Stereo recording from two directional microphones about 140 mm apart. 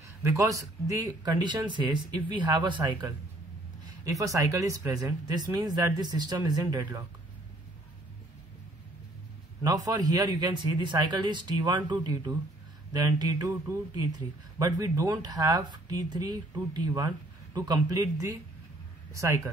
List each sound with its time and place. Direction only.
0.2 s a man's voice: 20° right (ahead or behind)
9.6 s a man's voice: 25° right (ahead or behind)